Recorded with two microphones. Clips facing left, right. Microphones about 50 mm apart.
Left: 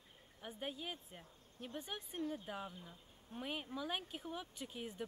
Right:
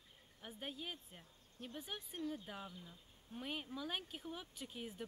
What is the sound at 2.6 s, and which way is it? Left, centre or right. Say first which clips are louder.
Speech: left 2 dB; left.